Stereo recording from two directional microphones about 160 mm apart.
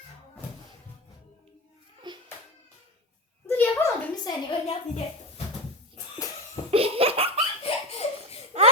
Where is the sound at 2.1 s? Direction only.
30° right (ahead or behind).